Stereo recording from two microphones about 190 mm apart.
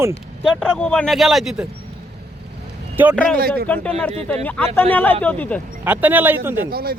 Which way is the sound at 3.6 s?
5° left (ahead or behind).